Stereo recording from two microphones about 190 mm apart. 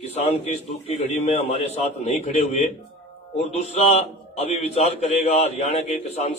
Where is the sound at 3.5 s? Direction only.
35° left (ahead or behind).